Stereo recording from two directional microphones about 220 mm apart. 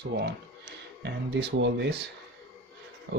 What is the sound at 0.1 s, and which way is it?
Speech, 50° right (ahead or behind).